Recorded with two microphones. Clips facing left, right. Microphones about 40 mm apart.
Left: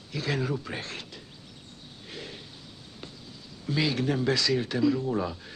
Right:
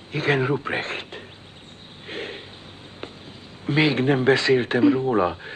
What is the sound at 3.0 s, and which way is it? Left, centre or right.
Speech, right.